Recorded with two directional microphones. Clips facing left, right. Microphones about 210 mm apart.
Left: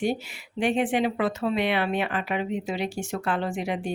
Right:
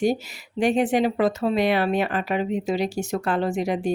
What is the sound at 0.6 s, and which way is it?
Speech, 40° right (ahead or behind).